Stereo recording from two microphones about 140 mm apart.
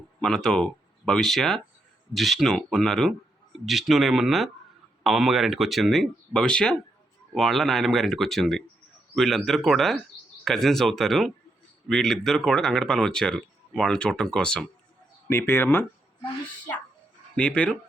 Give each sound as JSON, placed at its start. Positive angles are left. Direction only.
{"t": 0.2, "sound": "speech", "side_deg": 5}
{"t": 15.3, "sound": "speech", "side_deg": 15}
{"t": 17.3, "sound": "speech", "side_deg": 10}